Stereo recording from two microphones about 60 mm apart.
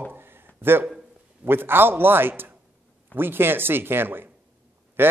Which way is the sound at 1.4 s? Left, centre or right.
Right.